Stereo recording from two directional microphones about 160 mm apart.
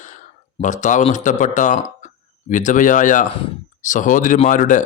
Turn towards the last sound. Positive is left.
turn(degrees=50)  # may be behind; listen again after turning